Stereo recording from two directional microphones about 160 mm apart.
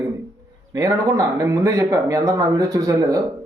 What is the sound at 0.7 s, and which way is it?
Speech, 20° right (ahead or behind).